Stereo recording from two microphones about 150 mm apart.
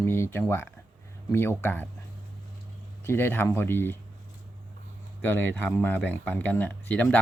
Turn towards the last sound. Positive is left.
turn(degrees=10)  # may be behind; listen again after turning